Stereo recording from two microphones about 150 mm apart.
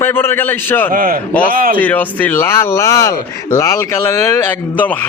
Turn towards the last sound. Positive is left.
turn(degrees=10)  # may be behind; listen again after turning